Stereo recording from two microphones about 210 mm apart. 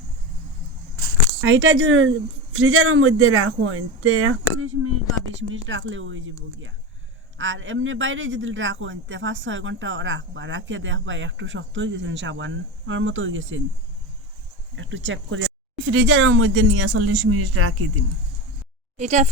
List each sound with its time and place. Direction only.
1.0 s speech: 65° right (ahead or behind); by 4.9 s 90° right
5.6 s a man's voice: 65° right (ahead or behind)
7.3 s a man's voice: 65° right (ahead or behind)
14.8 s a man's voice: 65° right (ahead or behind); by 17.8 s 90° right
18.9 s a woman's voice: 35° right (ahead or behind)